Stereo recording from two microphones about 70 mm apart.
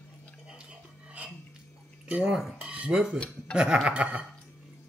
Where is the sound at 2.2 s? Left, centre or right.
Centre.